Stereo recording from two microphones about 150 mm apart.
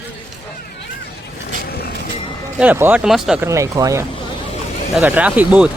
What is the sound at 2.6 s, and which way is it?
Speech, 10° right (ahead or behind).